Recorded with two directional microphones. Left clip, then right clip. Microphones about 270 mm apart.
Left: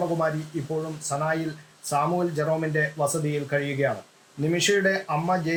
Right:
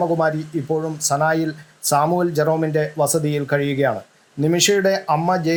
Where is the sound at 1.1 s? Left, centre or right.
Centre.